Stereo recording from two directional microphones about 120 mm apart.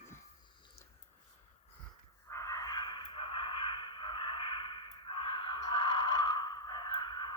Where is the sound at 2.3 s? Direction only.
30° left (ahead or behind).